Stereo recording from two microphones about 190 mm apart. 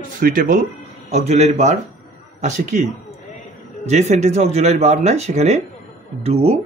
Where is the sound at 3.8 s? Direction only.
35° right (ahead or behind).